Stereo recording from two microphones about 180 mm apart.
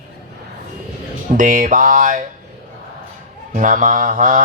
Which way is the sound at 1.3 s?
50° right (ahead or behind).